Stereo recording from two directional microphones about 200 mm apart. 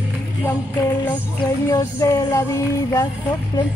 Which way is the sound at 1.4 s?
15° left (ahead or behind).